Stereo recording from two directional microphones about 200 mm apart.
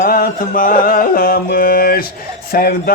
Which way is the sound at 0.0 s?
45° left (ahead or behind).